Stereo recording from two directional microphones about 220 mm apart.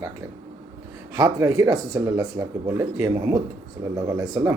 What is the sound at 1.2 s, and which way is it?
Speech, 15° right (ahead or behind).